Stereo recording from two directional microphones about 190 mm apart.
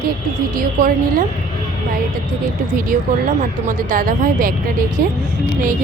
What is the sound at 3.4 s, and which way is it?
Speech, 45° right (ahead or behind).